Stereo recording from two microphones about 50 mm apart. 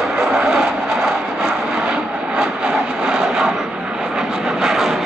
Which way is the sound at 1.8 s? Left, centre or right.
Centre.